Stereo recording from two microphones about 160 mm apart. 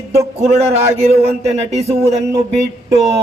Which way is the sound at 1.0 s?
40° right (ahead or behind).